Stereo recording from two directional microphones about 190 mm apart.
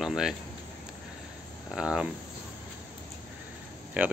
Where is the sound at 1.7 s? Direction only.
5° right (ahead or behind).